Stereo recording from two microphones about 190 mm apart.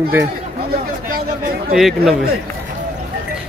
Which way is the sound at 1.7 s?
Centre (ahead or behind).